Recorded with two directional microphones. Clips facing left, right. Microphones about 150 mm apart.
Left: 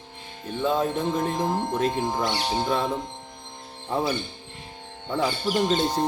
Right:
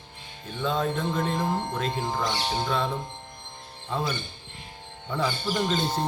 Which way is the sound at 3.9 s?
30° left (ahead or behind).